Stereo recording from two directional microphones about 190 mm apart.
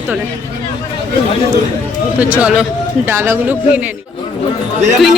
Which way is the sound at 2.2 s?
5° right (ahead or behind).